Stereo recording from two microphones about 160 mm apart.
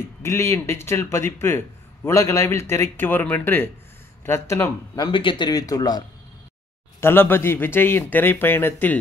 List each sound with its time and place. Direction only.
0.2 s speech: 15° left (ahead or behind)
5.0 s speech: 30° left (ahead or behind); by 8.9 s 15° left (ahead or behind)